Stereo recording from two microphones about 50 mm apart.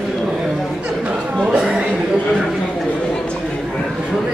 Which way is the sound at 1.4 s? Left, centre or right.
Right.